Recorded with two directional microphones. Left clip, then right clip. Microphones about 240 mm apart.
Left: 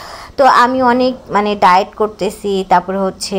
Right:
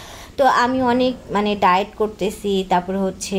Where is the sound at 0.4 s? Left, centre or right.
Centre.